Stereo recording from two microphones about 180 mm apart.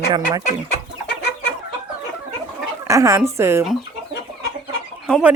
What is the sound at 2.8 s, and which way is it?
Speech, 15° right (ahead or behind).